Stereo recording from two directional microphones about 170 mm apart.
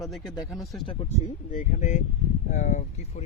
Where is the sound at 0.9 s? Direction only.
30° left (ahead or behind).